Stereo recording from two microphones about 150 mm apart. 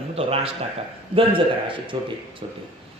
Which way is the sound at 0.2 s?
40° right (ahead or behind).